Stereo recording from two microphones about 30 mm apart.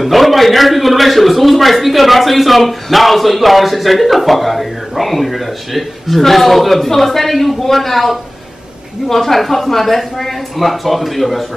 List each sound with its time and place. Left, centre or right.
0.0 s a man's voice: centre